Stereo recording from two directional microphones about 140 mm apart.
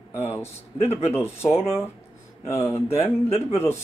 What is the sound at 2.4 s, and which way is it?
Speech, 20° left (ahead or behind).